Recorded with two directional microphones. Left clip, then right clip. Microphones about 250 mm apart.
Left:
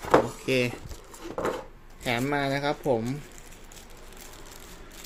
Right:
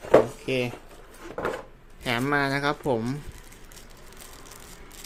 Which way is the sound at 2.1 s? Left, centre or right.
Centre.